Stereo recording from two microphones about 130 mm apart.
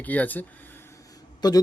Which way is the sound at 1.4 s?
30° left (ahead or behind).